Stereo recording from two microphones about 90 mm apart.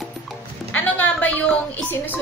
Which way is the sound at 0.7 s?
15° left (ahead or behind).